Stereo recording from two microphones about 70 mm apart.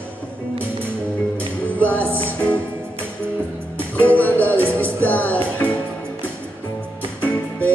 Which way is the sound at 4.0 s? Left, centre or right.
Left.